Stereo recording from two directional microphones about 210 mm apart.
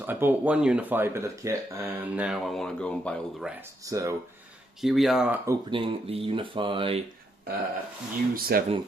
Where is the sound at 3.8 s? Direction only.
15° right (ahead or behind).